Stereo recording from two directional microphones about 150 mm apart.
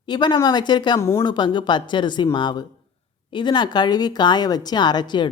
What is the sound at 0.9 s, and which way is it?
Speech, 20° left (ahead or behind).